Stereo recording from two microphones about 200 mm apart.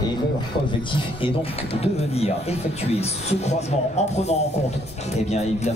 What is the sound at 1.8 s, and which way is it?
Speech, 30° left (ahead or behind).